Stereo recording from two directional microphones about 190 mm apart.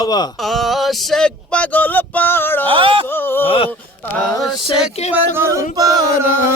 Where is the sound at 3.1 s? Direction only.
10° left (ahead or behind).